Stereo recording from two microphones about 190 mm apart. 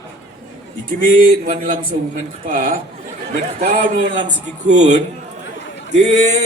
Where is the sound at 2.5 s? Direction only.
50° right (ahead or behind).